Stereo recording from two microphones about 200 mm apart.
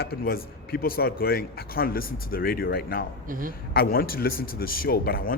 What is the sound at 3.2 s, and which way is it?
Speech, 45° right (ahead or behind).